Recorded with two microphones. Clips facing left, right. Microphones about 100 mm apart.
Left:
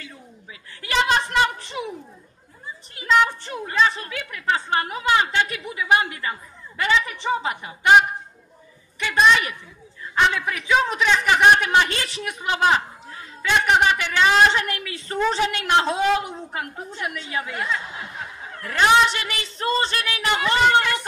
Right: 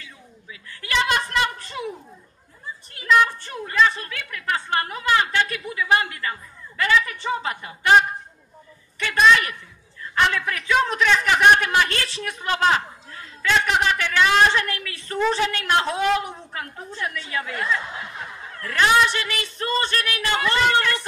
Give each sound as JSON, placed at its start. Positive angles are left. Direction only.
{"t": 0.0, "sound": "a woman's voice", "side_deg": 30}
{"t": 3.0, "sound": "a woman's voice", "side_deg": 20}
{"t": 9.0, "sound": "a woman's voice", "side_deg": 15}